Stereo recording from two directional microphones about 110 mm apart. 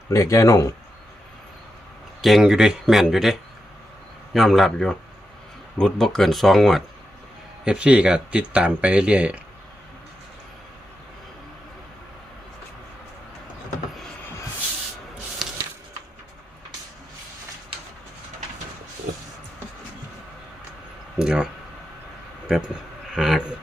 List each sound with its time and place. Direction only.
0.1 s speech: 25° left (ahead or behind)
2.2 s speech: 5° right (ahead or behind)
4.4 s speech: centre (ahead or behind)
15.4 s printer: centre (ahead or behind)
21.2 s a sound: 5° right (ahead or behind)
22.4 s a sound: 5° right (ahead or behind)